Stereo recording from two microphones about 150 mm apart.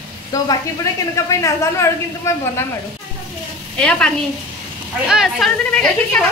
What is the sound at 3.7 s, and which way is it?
A woman's voice, 5° left (ahead or behind).